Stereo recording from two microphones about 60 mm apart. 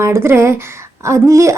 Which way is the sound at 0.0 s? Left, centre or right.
Right.